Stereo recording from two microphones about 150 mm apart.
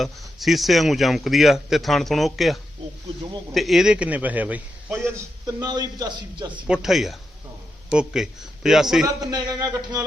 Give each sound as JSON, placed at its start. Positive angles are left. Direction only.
{"t": 0.0, "sound": "a man's voice", "side_deg": 0}
{"t": 5.5, "sound": "a man's voice", "side_deg": -25}
{"t": 6.7, "sound": "a man's voice", "side_deg": 0}
{"t": 9.0, "sound": "a man's voice", "side_deg": -25}